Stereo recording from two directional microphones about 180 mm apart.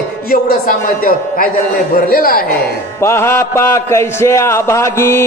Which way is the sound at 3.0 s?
15° left (ahead or behind).